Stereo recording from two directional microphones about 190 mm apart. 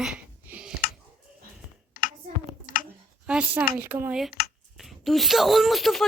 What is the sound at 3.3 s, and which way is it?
Speech, 5° right (ahead or behind).